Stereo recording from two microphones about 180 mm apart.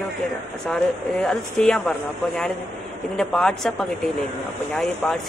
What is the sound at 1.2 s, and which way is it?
Speech, 5° left (ahead or behind).